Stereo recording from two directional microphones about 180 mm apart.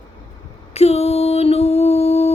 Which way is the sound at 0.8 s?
35° left (ahead or behind).